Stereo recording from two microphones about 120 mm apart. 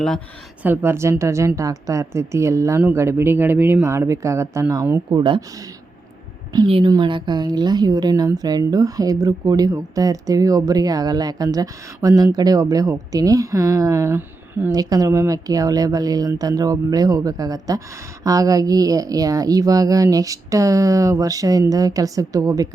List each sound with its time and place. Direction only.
0.6 s speech: 20° right (ahead or behind)
5.1 s speech: 40° right (ahead or behind)
6.7 s a woman's voice: 45° right (ahead or behind); by 14.7 s 15° right (ahead or behind)
14.7 s speech: 30° right (ahead or behind)